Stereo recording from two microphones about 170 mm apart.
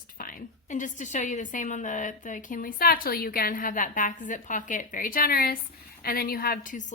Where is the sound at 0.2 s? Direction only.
55° left (ahead or behind).